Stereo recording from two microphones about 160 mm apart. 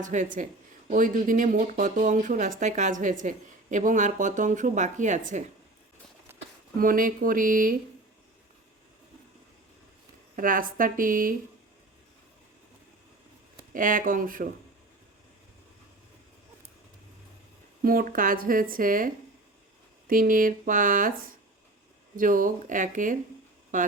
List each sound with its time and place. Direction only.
0.0 s speech: 50° right (ahead or behind)
6.7 s speech: 60° right (ahead or behind)
10.3 s speech: 60° right (ahead or behind)
13.7 s speech: 55° right (ahead or behind)
17.8 s speech: 65° right (ahead or behind)